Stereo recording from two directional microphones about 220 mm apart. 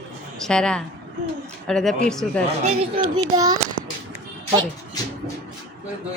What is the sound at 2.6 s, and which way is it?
Speech, 30° right (ahead or behind).